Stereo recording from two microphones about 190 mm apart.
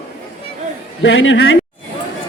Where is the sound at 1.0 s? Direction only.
80° left.